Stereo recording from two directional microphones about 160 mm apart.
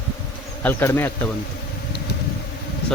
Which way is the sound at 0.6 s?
15° left (ahead or behind).